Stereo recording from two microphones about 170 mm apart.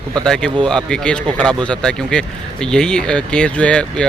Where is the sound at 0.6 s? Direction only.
5° left (ahead or behind).